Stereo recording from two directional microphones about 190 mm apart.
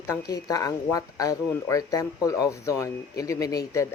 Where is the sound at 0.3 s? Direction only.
20° left (ahead or behind).